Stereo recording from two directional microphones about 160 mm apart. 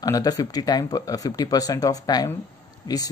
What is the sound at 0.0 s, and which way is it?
Speech, 20° left (ahead or behind).